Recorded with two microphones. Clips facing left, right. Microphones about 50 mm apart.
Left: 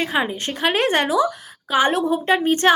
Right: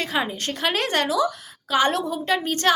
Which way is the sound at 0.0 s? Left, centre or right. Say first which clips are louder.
Left 3 dB; centre.